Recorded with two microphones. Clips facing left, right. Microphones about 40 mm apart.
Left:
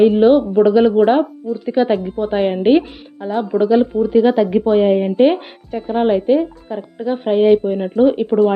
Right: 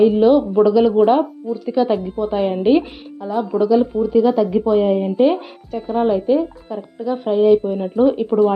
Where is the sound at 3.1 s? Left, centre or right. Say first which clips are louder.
Left 2 dB; left.